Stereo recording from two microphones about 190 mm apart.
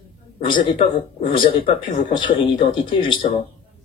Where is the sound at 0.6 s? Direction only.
25° left (ahead or behind).